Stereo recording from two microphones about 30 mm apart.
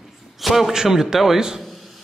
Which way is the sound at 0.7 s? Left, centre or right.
Centre.